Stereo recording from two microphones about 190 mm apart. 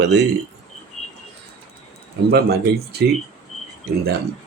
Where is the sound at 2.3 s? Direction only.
55° right (ahead or behind).